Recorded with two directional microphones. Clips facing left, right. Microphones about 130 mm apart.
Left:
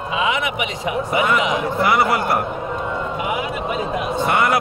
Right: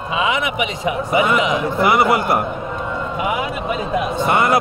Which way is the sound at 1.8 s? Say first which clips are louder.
Right 3 dB; 20° right (ahead or behind).